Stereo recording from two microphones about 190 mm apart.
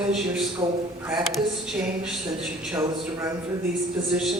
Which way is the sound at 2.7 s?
15° right (ahead or behind).